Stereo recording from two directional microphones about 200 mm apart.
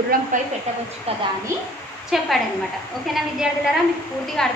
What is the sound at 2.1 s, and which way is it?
Speech, centre (ahead or behind).